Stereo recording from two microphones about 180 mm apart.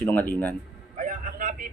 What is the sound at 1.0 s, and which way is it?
Vehicle, 50° right (ahead or behind).